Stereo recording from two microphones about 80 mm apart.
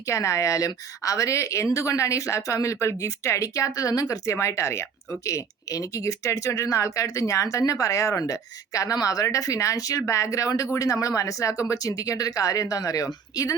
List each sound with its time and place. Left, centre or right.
0.1 s a woman's voice: left